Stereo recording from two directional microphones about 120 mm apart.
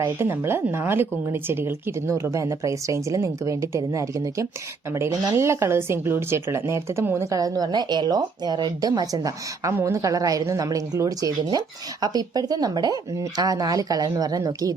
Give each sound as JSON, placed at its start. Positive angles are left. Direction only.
{"t": 0.0, "sound": "speech", "side_deg": -20}